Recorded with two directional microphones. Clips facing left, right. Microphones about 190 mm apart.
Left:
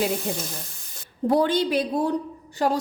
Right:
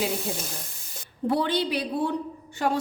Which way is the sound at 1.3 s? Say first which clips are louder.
Left 4 dB; 45° left (ahead or behind).